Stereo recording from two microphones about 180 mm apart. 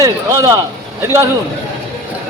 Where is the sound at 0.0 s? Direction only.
20° right (ahead or behind).